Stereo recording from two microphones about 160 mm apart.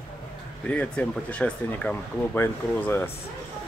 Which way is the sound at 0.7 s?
10° left (ahead or behind).